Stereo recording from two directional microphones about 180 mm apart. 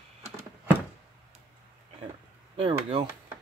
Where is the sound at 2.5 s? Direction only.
30° right (ahead or behind).